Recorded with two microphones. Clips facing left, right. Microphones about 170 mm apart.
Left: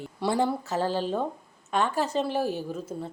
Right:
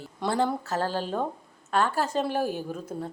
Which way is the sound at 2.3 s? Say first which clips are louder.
Even; 50° right (ahead or behind).